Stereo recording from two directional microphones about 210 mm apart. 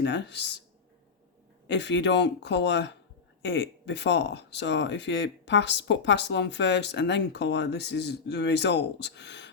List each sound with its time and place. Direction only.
0.0 s speech: 55° left (ahead or behind)
1.6 s speech: 55° left (ahead or behind)